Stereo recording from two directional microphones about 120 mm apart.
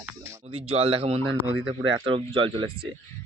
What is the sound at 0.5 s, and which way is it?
Speech, 55° right (ahead or behind).